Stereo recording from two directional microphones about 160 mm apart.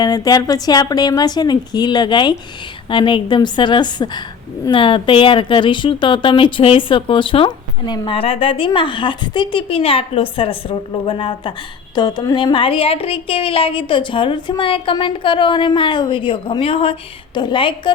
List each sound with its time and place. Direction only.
0.0 s a woman's voice: 25° left (ahead or behind)